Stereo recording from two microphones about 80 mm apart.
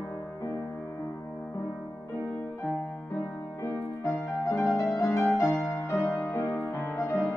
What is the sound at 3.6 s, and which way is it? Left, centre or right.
Music, left.